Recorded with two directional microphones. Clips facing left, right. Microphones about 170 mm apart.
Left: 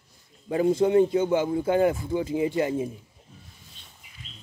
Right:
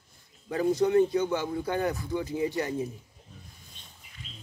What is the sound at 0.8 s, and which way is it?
Speech, 20° left (ahead or behind).